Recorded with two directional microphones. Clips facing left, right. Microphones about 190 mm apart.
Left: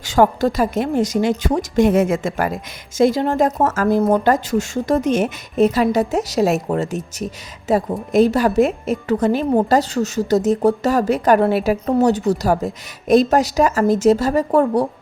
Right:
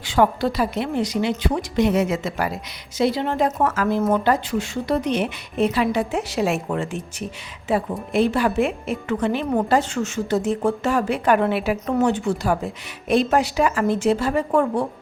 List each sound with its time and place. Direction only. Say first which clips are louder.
0.0 s a woman's voice: left 4 dB; 45° left (ahead or behind)